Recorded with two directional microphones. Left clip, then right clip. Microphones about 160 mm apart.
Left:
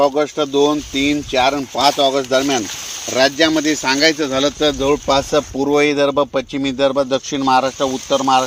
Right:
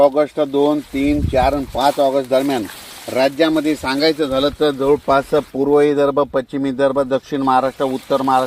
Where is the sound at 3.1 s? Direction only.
10° left (ahead or behind).